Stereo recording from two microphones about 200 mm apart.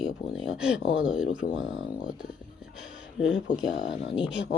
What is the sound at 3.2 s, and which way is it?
Speech, 5° right (ahead or behind).